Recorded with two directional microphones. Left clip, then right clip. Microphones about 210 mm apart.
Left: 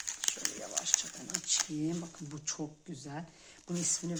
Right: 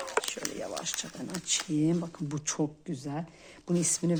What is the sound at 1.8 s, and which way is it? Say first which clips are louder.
Speech: right 8 dB; 45° right (ahead or behind).